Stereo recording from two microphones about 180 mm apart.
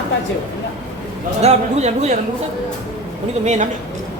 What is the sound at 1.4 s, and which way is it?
Speech, 35° right (ahead or behind).